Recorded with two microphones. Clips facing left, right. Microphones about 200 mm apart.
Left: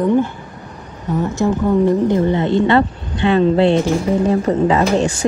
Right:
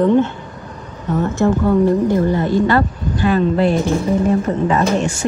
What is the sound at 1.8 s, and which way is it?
Speech, 20° left (ahead or behind).